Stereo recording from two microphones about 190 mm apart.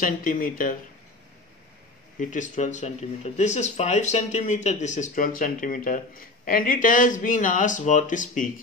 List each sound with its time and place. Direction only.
0.0 s speech: 45° left (ahead or behind)
2.1 s speech: 40° left (ahead or behind)